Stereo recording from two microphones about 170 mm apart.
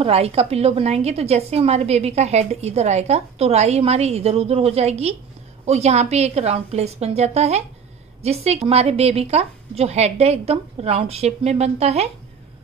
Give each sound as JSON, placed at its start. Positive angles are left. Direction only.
{"t": 0.0, "sound": "a woman's voice", "side_deg": -35}